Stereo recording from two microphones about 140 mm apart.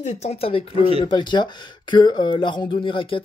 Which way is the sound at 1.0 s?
35° left (ahead or behind).